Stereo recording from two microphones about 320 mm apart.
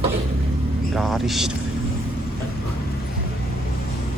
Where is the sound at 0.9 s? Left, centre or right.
Centre.